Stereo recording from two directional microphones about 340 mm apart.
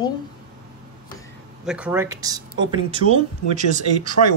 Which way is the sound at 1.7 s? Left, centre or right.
Centre.